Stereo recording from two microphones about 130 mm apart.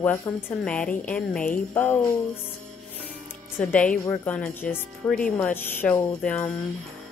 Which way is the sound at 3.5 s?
10° left (ahead or behind).